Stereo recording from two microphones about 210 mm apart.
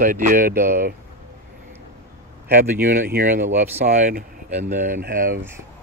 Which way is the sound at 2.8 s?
40° right (ahead or behind).